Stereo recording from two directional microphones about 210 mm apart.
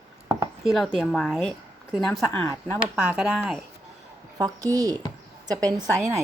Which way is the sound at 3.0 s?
5° right (ahead or behind).